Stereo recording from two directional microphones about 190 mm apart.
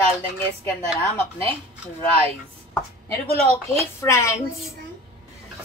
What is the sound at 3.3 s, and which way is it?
Speech, 35° right (ahead or behind).